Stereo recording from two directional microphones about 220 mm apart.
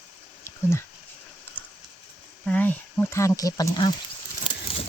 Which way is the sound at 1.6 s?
5° left (ahead or behind).